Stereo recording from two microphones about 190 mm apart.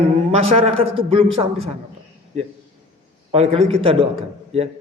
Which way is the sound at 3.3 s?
30° right (ahead or behind).